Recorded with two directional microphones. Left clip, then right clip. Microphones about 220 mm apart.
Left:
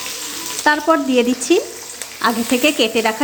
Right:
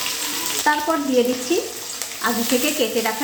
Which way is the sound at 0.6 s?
45° left (ahead or behind).